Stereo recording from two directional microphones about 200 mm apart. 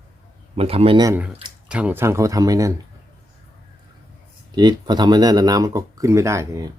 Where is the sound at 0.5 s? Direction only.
30° right (ahead or behind).